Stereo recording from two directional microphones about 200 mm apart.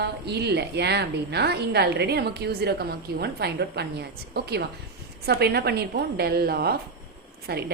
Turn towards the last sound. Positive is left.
turn(degrees=-50)  # may be behind; listen again after turning